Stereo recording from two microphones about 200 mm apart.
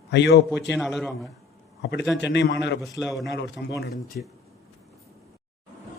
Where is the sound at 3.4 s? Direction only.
60° left (ahead or behind).